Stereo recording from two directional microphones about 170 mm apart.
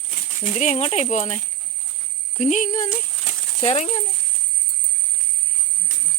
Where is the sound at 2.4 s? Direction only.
45° left (ahead or behind).